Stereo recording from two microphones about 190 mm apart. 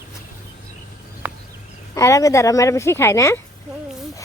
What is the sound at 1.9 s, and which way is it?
Speech, 15° left (ahead or behind).